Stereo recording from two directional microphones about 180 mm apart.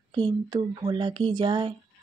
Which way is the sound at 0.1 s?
25° right (ahead or behind).